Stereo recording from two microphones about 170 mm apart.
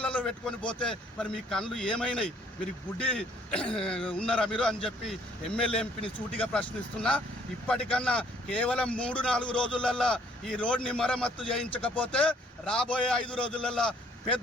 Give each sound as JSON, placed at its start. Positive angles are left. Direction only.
{"t": 0.0, "sound": "a man's voice", "side_deg": 5}
{"t": 6.0, "sound": "speech", "side_deg": 30}
{"t": 6.5, "sound": "a man's voice", "side_deg": 5}